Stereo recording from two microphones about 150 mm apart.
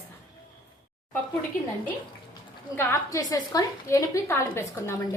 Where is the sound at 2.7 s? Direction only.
20° left (ahead or behind).